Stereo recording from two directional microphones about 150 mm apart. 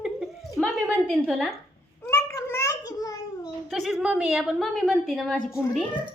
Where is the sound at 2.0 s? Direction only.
20° left (ahead or behind).